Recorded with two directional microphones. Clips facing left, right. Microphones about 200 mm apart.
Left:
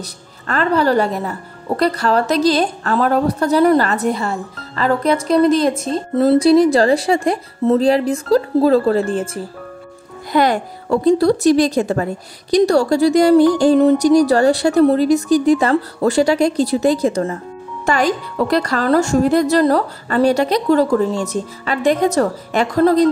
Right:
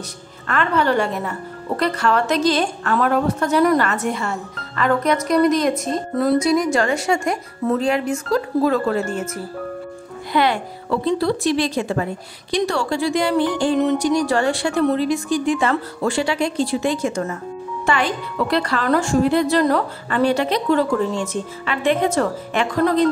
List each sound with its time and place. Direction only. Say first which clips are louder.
0.5 s a woman's voice: left 3 dB; 35° left (ahead or behind)
10.3 s a woman's voice: left 4 dB; 40° left (ahead or behind)